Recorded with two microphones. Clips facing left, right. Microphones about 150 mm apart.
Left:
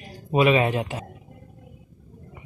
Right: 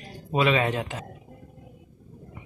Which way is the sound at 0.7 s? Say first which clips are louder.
Left 3 dB; 10° left (ahead or behind).